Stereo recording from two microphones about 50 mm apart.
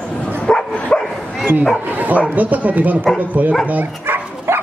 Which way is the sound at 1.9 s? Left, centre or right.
Right.